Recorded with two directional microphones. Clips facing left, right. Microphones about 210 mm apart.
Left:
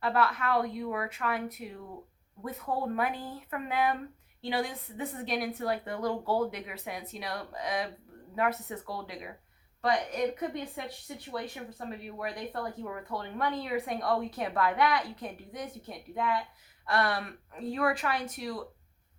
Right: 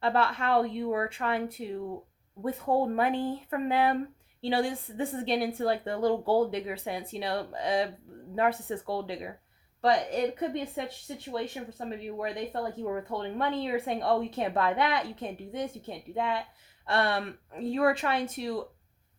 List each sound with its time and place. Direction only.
0.0 s speech: 30° right (ahead or behind)